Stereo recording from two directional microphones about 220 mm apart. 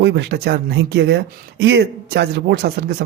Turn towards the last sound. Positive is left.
turn(degrees=-45)  # may be behind; listen again after turning